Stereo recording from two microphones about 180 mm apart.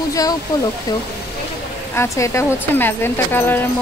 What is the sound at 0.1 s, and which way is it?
Speech, 20° left (ahead or behind).